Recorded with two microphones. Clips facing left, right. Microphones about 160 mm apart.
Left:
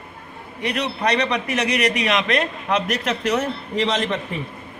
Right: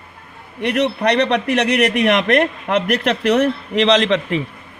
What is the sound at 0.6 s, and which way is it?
A man's voice, 60° right (ahead or behind).